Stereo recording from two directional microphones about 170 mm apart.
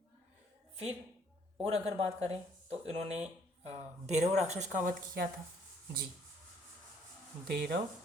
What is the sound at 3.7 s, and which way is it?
Speech, 40° right (ahead or behind).